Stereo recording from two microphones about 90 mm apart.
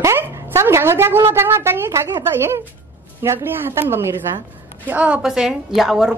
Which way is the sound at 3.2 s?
25° right (ahead or behind).